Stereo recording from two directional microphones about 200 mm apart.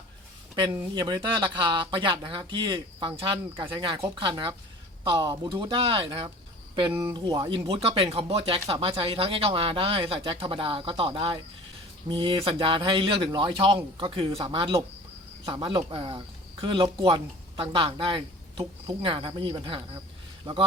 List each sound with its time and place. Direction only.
0.5 s a man's voice: 20° right (ahead or behind)